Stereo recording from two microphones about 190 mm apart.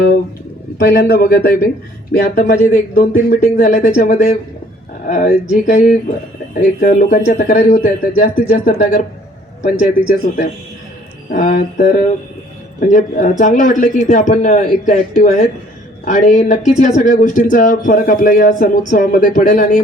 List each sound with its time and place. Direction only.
0.8 s a man's voice: 55° left (ahead or behind); by 9.9 s 40° left (ahead or behind)
11.3 s a man's voice: 45° left (ahead or behind)